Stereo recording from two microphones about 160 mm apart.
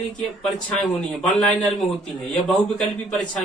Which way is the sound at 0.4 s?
Centre (ahead or behind).